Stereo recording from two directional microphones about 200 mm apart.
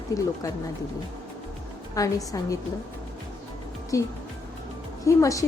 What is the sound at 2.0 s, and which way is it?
Speech, 15° left (ahead or behind).